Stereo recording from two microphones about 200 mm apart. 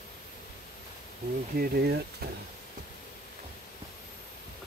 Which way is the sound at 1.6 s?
55° right (ahead or behind).